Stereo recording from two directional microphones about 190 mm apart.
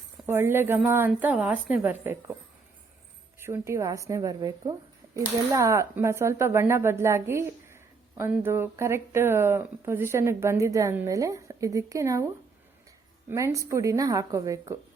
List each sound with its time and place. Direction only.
0.3 s speech: 10° right (ahead or behind)
3.4 s speech: 15° right (ahead or behind)
13.3 s speech: 15° right (ahead or behind)